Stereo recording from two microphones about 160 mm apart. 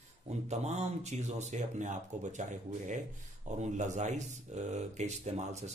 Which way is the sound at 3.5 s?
50° right (ahead or behind).